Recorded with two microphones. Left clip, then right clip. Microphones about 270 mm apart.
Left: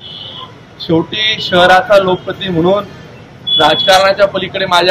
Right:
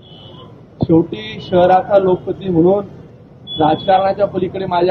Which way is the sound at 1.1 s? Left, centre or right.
Centre.